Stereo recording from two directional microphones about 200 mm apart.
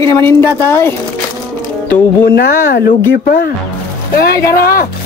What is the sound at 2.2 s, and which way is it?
Speech, 50° left (ahead or behind).